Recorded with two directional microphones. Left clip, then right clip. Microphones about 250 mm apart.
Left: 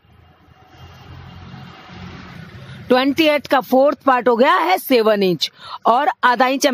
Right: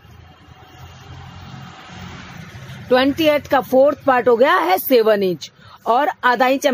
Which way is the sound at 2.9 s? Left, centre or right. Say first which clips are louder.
Even; left.